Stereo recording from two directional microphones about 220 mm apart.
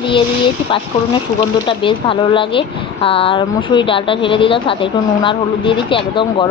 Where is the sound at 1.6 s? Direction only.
25° left (ahead or behind).